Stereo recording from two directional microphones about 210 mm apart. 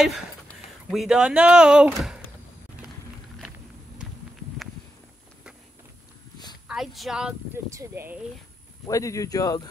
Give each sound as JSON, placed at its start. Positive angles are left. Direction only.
{"t": 0.8, "sound": "speech", "side_deg": 0}
{"t": 2.8, "sound": "a sound", "side_deg": -5}
{"t": 6.7, "sound": "speech", "side_deg": 0}
{"t": 8.8, "sound": "speech", "side_deg": 15}